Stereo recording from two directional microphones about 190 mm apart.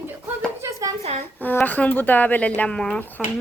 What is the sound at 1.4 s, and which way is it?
A woman's voice, 10° left (ahead or behind).